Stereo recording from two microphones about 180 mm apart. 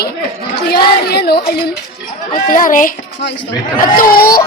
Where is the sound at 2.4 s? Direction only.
50° left (ahead or behind).